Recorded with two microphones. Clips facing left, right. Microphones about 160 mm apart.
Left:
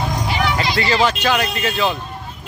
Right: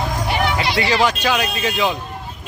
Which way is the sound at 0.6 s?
70° right (ahead or behind).